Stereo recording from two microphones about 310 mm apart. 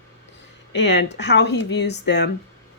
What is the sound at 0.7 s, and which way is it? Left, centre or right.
Speech, left.